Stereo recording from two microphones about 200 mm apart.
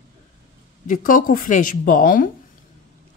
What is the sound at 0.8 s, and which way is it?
Speech, 40° left (ahead or behind).